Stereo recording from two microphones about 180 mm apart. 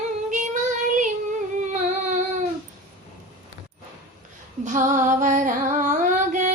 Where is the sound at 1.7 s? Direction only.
45° right (ahead or behind).